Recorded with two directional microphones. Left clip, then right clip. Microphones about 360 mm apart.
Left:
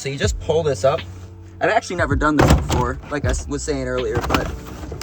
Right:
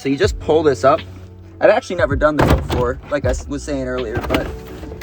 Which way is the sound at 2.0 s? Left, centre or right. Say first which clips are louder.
Right 2 dB; centre.